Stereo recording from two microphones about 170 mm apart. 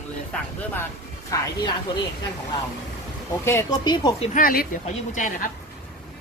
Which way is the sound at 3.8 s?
25° left (ahead or behind).